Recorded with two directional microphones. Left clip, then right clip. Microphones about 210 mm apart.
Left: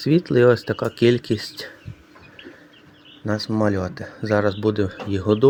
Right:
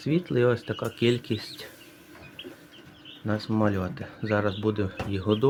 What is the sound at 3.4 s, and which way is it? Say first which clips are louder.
Speech: left 5 dB; 20° left (ahead or behind).